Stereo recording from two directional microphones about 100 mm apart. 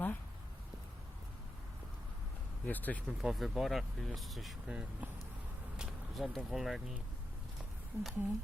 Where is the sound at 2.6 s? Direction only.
15° left (ahead or behind).